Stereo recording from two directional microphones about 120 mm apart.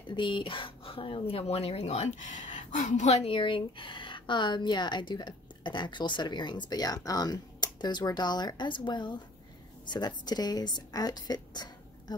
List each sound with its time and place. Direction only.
0.0 s speech: 40° left (ahead or behind); by 3.3 s 65° left (ahead or behind)
3.3 s a woman's voice: 45° left (ahead or behind)